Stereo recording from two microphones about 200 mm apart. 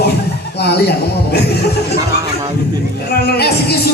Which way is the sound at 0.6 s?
55° left (ahead or behind).